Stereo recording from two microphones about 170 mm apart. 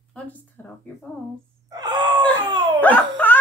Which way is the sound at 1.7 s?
25° right (ahead or behind).